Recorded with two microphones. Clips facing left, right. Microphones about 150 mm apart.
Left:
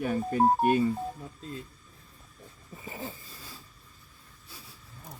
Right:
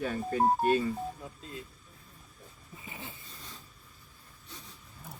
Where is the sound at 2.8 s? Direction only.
40° left (ahead or behind).